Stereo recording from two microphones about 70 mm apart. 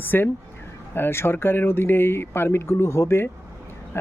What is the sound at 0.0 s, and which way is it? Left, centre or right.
Speech, left.